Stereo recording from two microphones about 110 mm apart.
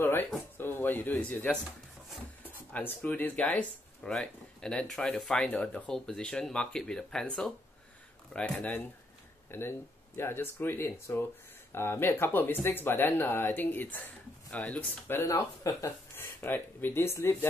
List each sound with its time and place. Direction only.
0.0 s a sound: 20° left (ahead or behind)
0.6 s music: 20° left (ahead or behind)
1.3 s speech: 15° left (ahead or behind)
2.7 s speech: 15° left (ahead or behind)